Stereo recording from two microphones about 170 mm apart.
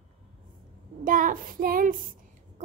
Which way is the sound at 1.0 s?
50° right (ahead or behind).